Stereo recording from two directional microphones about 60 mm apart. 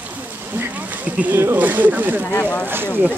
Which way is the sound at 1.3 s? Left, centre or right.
Right.